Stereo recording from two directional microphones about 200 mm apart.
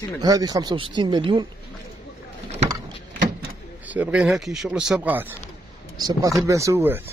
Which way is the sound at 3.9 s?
5° right (ahead or behind).